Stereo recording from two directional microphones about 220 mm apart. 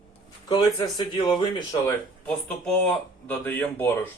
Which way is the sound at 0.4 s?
20° left (ahead or behind).